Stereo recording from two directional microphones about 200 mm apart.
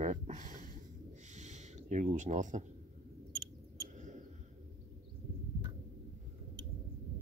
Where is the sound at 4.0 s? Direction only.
35° right (ahead or behind).